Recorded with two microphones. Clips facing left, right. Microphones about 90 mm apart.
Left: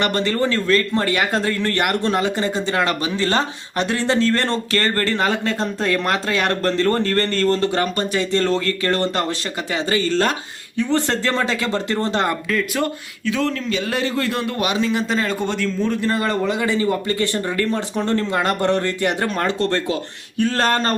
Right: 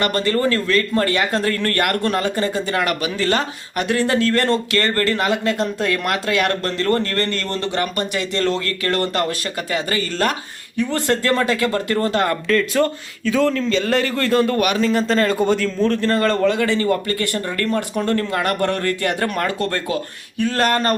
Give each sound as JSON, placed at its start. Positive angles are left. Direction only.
{"t": 0.0, "sound": "speech", "side_deg": 25}
{"t": 12.5, "sound": "a man's voice", "side_deg": 5}
{"t": 14.3, "sound": "a man's voice", "side_deg": 5}